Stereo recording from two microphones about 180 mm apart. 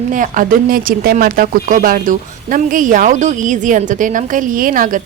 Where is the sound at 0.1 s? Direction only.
50° right (ahead or behind).